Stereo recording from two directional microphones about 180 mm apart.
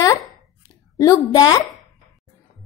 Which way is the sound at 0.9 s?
20° left (ahead or behind).